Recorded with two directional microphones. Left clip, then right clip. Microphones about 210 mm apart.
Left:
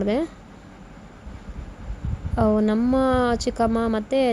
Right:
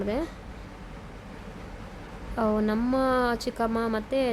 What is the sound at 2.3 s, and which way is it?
Speech, 25° left (ahead or behind).